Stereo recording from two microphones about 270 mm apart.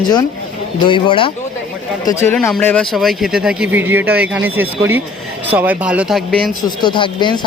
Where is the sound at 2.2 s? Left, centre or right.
Centre.